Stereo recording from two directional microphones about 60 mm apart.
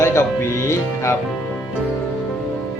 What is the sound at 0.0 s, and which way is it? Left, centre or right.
Music, left.